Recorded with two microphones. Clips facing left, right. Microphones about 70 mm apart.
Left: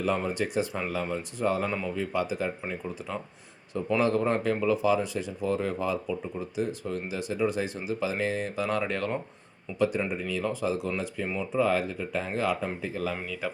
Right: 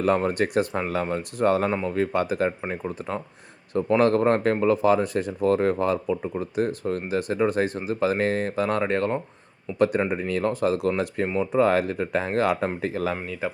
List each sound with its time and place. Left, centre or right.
0.0 s speech: right
2.6 s speech: right
9.7 s speech: right
13.4 s speech: right